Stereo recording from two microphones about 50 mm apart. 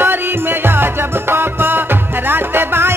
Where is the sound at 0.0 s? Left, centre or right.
Right.